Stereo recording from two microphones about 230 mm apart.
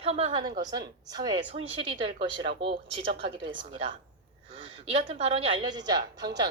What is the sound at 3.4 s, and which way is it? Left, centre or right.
Speech, right.